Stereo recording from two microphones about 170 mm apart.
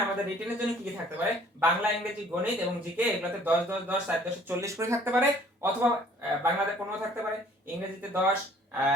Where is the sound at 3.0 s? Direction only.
10° right (ahead or behind).